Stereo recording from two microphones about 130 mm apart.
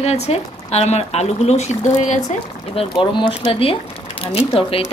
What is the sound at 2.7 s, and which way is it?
Speech, 45° left (ahead or behind).